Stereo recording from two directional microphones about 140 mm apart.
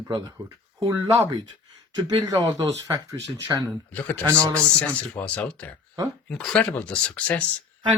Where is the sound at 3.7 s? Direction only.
10° left (ahead or behind).